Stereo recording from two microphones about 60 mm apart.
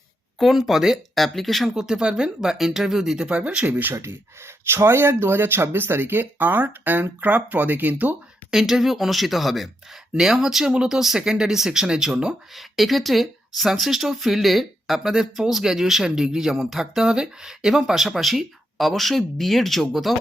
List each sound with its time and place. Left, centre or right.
0.3 s speech: centre
1.7 s speech: centre
3.2 s speech: centre
4.6 s speech: right
8.4 s speech: centre